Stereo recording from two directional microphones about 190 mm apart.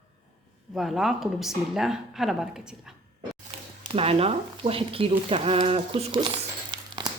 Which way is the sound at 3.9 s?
30° right (ahead or behind).